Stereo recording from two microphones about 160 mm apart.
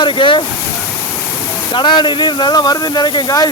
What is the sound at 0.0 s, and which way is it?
Speech, 30° left (ahead or behind).